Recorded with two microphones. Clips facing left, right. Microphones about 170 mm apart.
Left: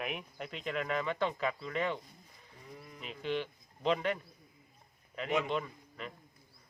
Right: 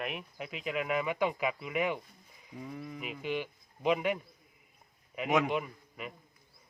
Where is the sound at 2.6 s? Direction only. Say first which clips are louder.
Right 9 dB; 90° right.